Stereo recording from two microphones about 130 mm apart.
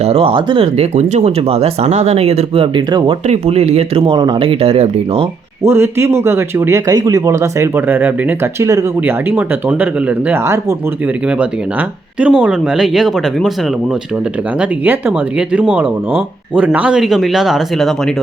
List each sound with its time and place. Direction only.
0.0 s speech: 50° right (ahead or behind)
0.9 s speech: 60° right (ahead or behind)
2.7 s speech: 40° right (ahead or behind)
3.2 s speech: 55° right (ahead or behind)
5.6 s speech: 20° right (ahead or behind)
12.2 s speech: 10° right (ahead or behind)
14.6 s speech: 10° right (ahead or behind)